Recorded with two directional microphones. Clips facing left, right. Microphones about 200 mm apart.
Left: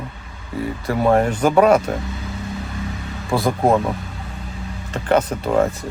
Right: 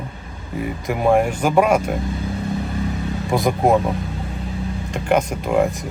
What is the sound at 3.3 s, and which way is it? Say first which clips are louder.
Speech: even; 15° right (ahead or behind).